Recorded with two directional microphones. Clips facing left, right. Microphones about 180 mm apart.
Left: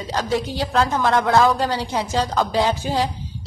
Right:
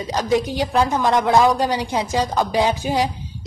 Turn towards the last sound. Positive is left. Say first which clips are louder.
# right 1 dB
turn(degrees=-15)  # may be behind; listen again after turning